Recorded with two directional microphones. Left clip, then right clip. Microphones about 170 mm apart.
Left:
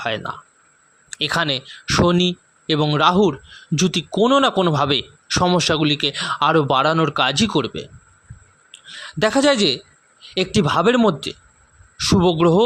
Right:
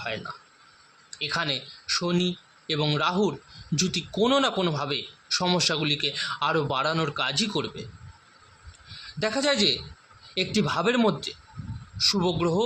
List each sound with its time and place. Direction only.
1.1 s speech: 60° left (ahead or behind)
9.1 s speech: 55° left (ahead or behind)